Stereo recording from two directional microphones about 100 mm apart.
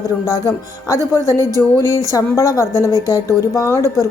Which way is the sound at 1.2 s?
25° left (ahead or behind).